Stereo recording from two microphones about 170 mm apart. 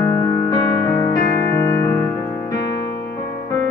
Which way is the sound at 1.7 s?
15° left (ahead or behind).